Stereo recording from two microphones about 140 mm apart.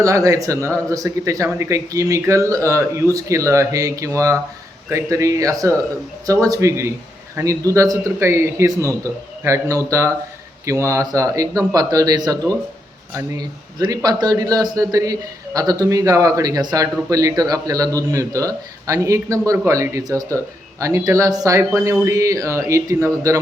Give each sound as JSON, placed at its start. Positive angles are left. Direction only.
{"t": 0.0, "sound": "a man's voice", "side_deg": -25}